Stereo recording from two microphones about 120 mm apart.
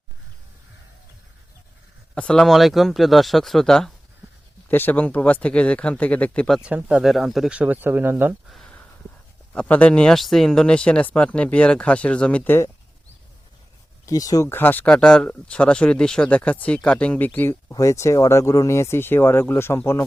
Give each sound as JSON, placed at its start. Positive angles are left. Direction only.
{"t": 2.1, "sound": "speech", "side_deg": 5}
{"t": 4.7, "sound": "speech", "side_deg": 15}
{"t": 6.5, "sound": "speech", "side_deg": -10}
{"t": 8.4, "sound": "speech", "side_deg": 0}
{"t": 14.0, "sound": "speech", "side_deg": 30}
{"t": 14.5, "sound": "speech", "side_deg": 15}